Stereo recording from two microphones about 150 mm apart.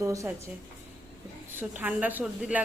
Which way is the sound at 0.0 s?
20° right (ahead or behind).